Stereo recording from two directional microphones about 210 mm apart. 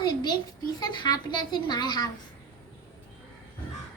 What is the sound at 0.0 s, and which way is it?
A child's voice, 20° left (ahead or behind).